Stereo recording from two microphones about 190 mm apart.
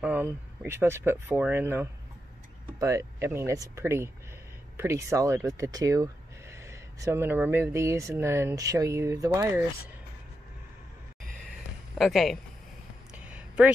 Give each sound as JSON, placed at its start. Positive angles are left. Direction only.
{"t": 0.0, "sound": "speech", "side_deg": -5}
{"t": 12.0, "sound": "speech", "side_deg": 0}
{"t": 13.1, "sound": "a sound", "side_deg": -5}